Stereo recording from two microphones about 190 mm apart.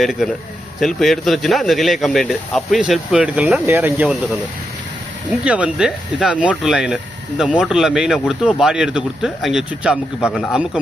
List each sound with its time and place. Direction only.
0.0 s speech: centre (ahead or behind)
5.5 s speech: 5° right (ahead or behind)